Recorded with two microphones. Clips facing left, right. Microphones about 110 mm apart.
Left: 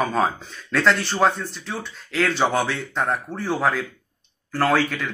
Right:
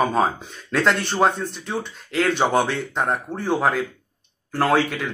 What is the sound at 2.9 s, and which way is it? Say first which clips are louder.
Speech: left 1 dB; 15° right (ahead or behind).